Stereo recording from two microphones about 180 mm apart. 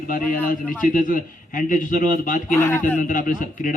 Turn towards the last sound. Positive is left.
turn(degrees=50)  # may be behind; listen again after turning